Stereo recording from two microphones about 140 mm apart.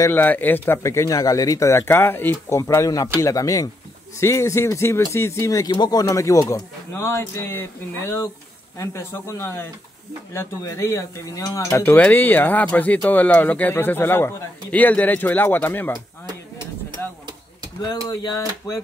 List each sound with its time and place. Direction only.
0.0 s speech: 15° left (ahead or behind)
17.8 s speech: 30° left (ahead or behind)